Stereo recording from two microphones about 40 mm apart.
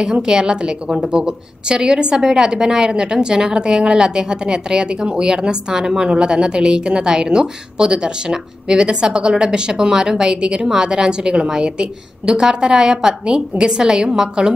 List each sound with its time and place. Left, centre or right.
0.0 s a woman's voice: centre